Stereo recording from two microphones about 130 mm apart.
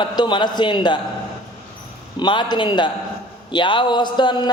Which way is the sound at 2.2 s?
35° left (ahead or behind).